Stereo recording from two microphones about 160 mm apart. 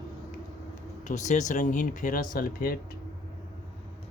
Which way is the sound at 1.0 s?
50° left (ahead or behind).